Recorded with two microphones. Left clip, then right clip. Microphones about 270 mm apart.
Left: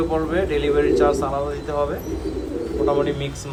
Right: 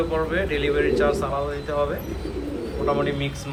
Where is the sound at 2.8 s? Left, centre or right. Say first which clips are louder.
Left 2 dB; centre.